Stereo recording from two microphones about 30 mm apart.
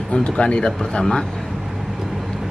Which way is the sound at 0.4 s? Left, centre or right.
Left.